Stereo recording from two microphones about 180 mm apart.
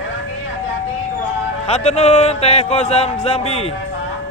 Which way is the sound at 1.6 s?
35° left (ahead or behind).